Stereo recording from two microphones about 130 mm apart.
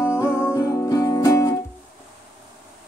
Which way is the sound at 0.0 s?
20° left (ahead or behind).